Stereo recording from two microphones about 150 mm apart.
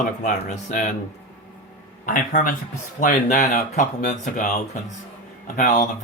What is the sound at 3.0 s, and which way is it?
Speech, 55° left (ahead or behind).